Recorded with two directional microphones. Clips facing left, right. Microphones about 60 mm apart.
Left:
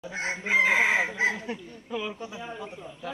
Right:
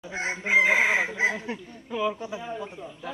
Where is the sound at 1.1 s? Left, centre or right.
Right.